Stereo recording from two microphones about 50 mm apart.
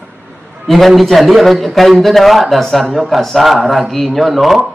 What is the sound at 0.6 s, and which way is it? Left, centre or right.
A man's voice, centre.